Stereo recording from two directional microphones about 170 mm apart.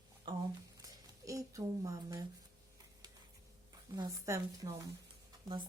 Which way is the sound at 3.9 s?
20° right (ahead or behind).